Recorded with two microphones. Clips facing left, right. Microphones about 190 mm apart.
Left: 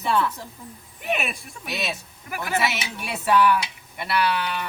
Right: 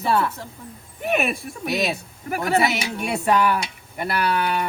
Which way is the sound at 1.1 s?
55° right (ahead or behind).